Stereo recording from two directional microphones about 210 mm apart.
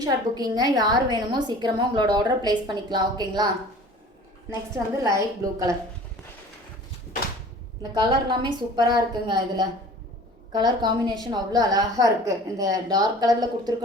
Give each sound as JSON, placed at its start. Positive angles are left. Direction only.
{"t": 0.0, "sound": "a woman's voice", "side_deg": -20}
{"t": 5.1, "sound": "a woman's voice", "side_deg": -15}
{"t": 7.8, "sound": "a woman's voice", "side_deg": -20}